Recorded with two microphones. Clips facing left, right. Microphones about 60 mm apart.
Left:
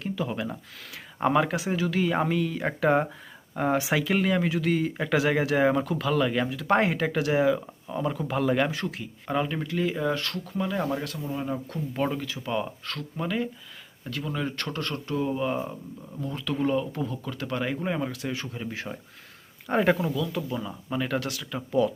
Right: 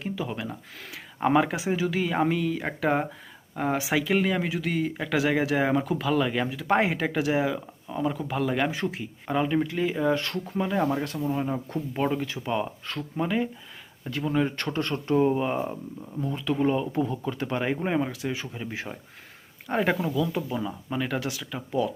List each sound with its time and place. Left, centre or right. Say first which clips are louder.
0.0 s speech: left 1 dB; centre
8.7 s speech: right 2 dB; centre
10.2 s speech: right 2 dB; right
10.6 s speech: right 3 dB; centre
12.2 s speech: right 3 dB; right
12.5 s speech: even; centre; by 15.4 s right
15.4 s speech: right 1 dB; centre
19.6 s speech: left 2 dB; centre
20.1 s speech: right 2 dB; centre